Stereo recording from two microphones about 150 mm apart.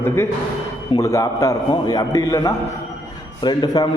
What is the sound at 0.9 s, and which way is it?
A man's voice, 20° left (ahead or behind).